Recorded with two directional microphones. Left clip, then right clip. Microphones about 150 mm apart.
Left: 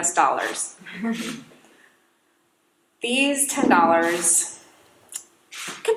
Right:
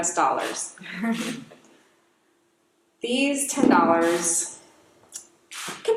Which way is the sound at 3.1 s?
25° left (ahead or behind).